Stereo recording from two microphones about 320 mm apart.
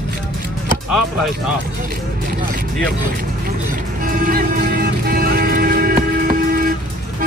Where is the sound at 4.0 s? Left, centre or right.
Right.